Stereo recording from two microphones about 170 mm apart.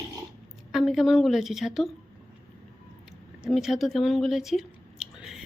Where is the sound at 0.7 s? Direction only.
Centre (ahead or behind).